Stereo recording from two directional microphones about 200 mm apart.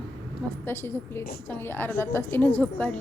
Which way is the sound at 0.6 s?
10° left (ahead or behind).